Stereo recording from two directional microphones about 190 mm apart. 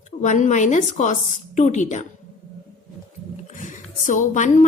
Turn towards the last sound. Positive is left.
turn(degrees=40)  # may be behind; listen again after turning